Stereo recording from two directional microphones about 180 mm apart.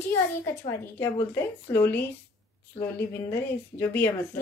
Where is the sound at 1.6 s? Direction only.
10° left (ahead or behind).